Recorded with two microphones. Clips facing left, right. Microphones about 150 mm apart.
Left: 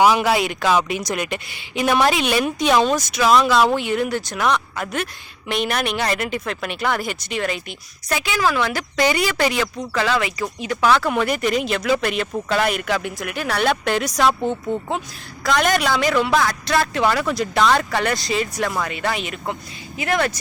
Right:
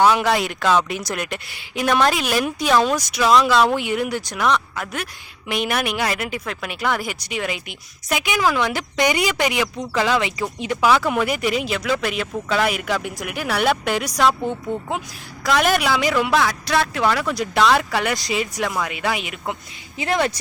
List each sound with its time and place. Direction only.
0.2 s speech: 5° left (ahead or behind)
3.8 s speech: 10° right (ahead or behind)
4.4 s speech: centre (ahead or behind); by 10.3 s 20° right (ahead or behind)
10.8 s speech: 5° right (ahead or behind)
15.4 s speech: 5° right (ahead or behind)
20.0 s speech: 25° right (ahead or behind)